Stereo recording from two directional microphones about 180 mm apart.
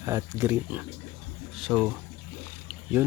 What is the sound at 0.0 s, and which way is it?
Speech, 15° right (ahead or behind).